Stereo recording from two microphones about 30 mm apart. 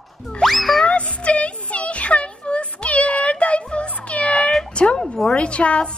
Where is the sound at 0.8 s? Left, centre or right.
Left.